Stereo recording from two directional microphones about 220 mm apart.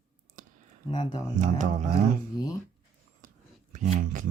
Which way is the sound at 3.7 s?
35° right (ahead or behind).